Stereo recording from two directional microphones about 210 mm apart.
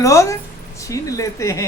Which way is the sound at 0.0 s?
15° left (ahead or behind).